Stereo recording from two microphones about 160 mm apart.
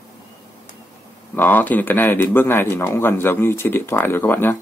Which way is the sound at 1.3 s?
10° left (ahead or behind).